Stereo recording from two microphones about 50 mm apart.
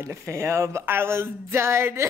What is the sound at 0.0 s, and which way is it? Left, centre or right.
Speech, right.